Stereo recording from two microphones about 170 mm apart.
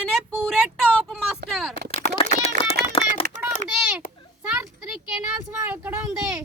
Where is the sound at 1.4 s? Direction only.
65° right (ahead or behind).